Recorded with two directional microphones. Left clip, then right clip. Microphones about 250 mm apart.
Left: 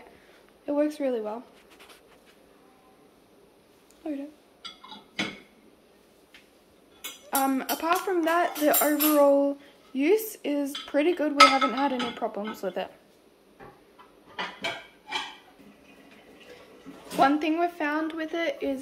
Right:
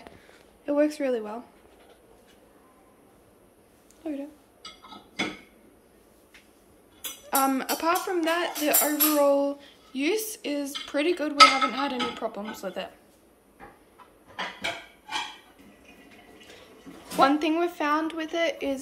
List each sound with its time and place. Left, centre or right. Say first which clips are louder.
0.7 s speech: right 2 dB; centre
4.0 s speech: even; centre
7.2 s speech: right 2 dB; centre
17.2 s speech: right 1 dB; centre